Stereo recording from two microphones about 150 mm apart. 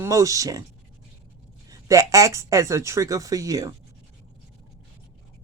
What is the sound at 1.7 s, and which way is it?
A woman's voice, 20° right (ahead or behind).